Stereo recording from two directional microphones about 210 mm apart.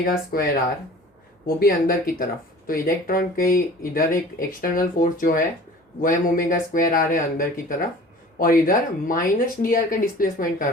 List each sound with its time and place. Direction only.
0.0 s speech: 45° left (ahead or behind)
1.5 s speech: 45° left (ahead or behind)